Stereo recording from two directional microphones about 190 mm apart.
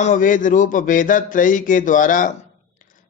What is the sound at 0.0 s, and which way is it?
A man's voice, 40° left (ahead or behind).